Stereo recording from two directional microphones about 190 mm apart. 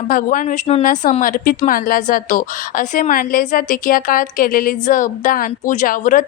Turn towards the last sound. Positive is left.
turn(degrees=45)  # may be behind; listen again after turning